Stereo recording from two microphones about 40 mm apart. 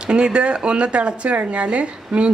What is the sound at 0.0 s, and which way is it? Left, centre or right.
A woman's voice, right.